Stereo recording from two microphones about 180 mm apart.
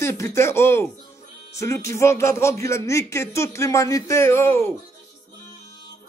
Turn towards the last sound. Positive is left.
turn(degrees=15)  # may be behind; listen again after turning